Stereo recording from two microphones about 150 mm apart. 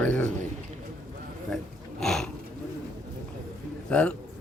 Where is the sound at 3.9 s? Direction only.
10° left (ahead or behind).